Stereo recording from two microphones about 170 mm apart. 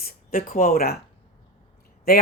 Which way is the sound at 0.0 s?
60° left (ahead or behind).